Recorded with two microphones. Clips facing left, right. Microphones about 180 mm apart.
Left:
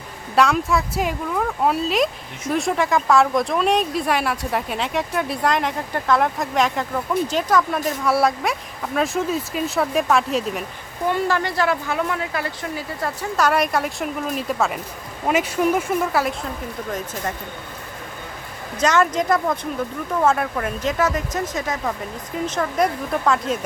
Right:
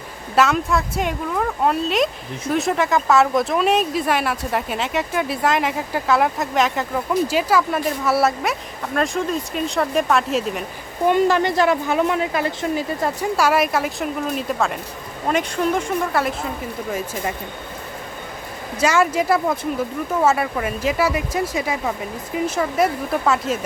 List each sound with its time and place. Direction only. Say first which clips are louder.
0.3 s speech: even; centre (ahead or behind)
11.1 s speech: right 5 dB; 20° right (ahead or behind)
13.3 s speech: even; 5° right (ahead or behind)
18.8 s speech: right 1 dB; 10° right (ahead or behind)